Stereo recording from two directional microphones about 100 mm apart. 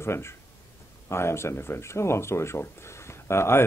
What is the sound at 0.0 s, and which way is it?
Speech, 25° left (ahead or behind).